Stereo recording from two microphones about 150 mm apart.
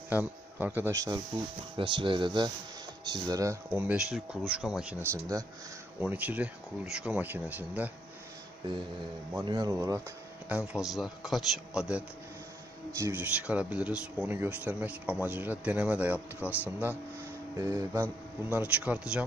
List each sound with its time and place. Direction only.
0.1 s speech: 10° right (ahead or behind)
1.8 s speech: 35° right (ahead or behind)
3.8 s a man's voice: 5° right (ahead or behind)
5.0 s speech: 20° right (ahead or behind)
9.4 s speech: 25° right (ahead or behind)
10.5 s a man's voice: 5° right (ahead or behind)
12.9 s speech: 15° right (ahead or behind)
18.5 s speech: 10° right (ahead or behind)